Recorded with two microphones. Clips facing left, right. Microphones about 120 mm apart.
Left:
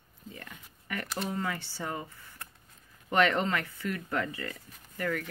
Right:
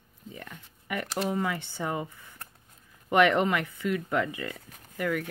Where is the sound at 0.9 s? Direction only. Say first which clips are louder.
Right 5 dB; 15° right (ahead or behind).